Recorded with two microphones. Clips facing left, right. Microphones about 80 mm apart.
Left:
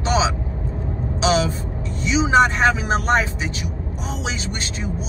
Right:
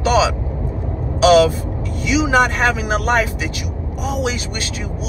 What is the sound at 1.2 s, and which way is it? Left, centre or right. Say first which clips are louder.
Speech: right 8 dB; right.